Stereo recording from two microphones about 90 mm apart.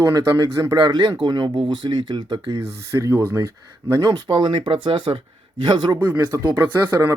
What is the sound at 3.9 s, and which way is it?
Speech, 45° right (ahead or behind).